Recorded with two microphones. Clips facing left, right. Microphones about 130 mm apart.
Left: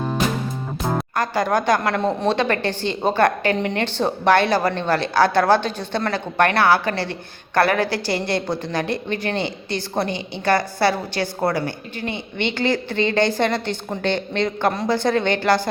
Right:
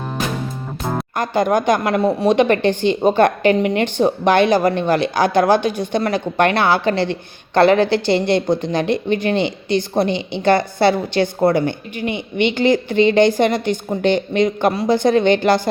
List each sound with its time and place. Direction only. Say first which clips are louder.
0.8 s music: even; centre (ahead or behind)
1.1 s a woman's voice: right 5 dB; 20° right (ahead or behind)